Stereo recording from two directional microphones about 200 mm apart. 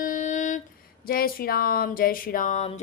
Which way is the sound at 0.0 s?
40° left (ahead or behind).